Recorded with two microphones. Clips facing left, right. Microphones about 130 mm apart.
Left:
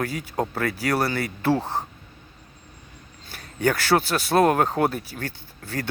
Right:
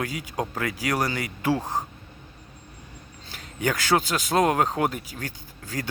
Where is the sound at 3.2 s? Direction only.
15° right (ahead or behind).